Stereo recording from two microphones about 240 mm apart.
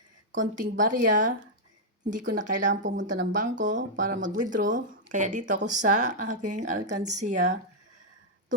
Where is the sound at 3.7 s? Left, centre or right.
Right.